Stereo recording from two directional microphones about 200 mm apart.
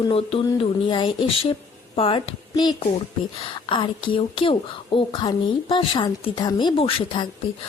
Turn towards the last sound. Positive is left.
turn(degrees=25)  # may be behind; listen again after turning